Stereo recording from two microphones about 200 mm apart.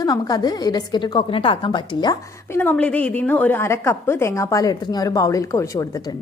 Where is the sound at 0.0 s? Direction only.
20° left (ahead or behind).